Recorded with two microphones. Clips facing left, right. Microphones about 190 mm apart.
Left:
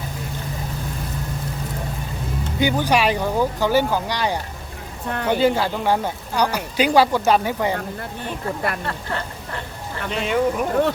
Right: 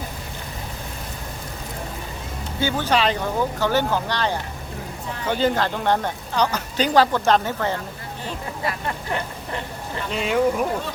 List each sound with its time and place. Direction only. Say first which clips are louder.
2.6 s speech: left 2 dB; 15° left (ahead or behind)
5.0 s speech: left 6 dB; 60° left (ahead or behind)
5.3 s speech: left 2 dB; 10° left (ahead or behind)
8.6 s speech: left 1 dB; 55° left (ahead or behind)
9.0 s speech: right 1 dB; 20° right (ahead or behind)
10.1 s speech: even; centre (ahead or behind)